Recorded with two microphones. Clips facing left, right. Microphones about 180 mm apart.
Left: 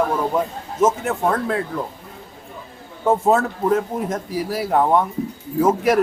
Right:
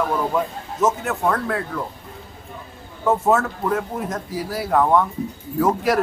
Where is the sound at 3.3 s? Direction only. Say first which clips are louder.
Left 2 dB; 25° left (ahead or behind).